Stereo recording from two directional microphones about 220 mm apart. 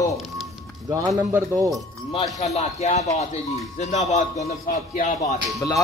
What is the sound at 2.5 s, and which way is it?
Speech, 30° left (ahead or behind).